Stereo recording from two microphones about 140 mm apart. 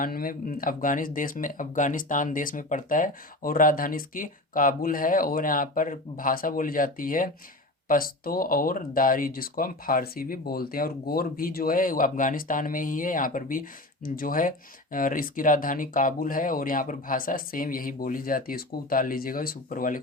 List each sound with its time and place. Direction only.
0.0 s speech: 90° left